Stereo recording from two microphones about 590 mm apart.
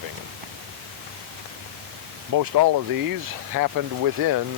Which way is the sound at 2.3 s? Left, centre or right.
Right.